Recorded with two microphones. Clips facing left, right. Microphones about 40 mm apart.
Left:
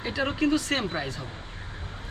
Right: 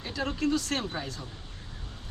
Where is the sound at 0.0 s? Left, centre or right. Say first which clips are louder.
Left 4 dB; left.